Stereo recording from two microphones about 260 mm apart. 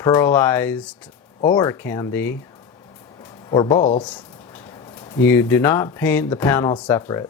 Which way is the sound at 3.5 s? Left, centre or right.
Centre.